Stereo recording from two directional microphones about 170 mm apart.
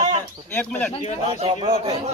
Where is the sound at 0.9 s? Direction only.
35° left (ahead or behind).